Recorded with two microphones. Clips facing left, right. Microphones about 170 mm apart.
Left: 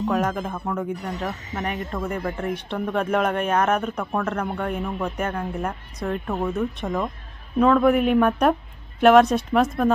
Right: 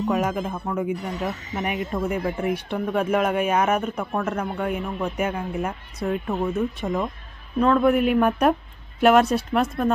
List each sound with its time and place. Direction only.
0.1 s speech: 5° right (ahead or behind)